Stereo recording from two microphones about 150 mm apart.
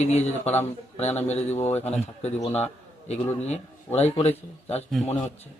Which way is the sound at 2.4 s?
15° left (ahead or behind).